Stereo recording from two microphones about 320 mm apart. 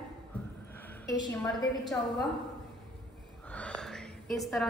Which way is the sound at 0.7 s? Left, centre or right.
Centre.